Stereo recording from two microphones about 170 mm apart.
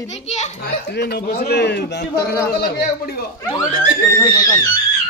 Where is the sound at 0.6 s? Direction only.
75° left (ahead or behind).